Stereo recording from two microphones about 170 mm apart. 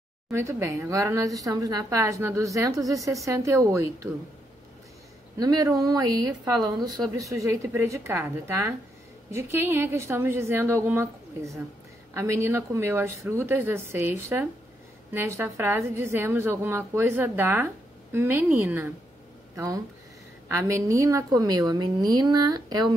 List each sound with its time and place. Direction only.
0.3 s a woman's voice: 15° right (ahead or behind)
5.4 s a woman's voice: 20° right (ahead or behind)